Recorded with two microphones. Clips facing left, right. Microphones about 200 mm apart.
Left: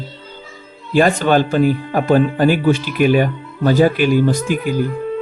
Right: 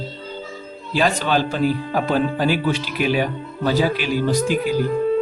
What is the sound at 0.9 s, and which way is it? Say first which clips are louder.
Speech: left 6 dB; 50° left (ahead or behind).